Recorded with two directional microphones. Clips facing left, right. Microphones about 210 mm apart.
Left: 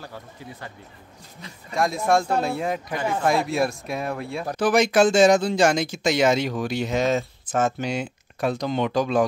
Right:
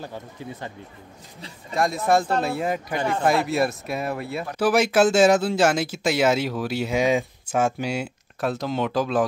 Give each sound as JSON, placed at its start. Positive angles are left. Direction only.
{"t": 0.0, "sound": "speech", "side_deg": -20}
{"t": 1.7, "sound": "speech", "side_deg": 0}